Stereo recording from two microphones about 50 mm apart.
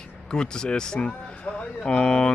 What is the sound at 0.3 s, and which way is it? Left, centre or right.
Speech, centre.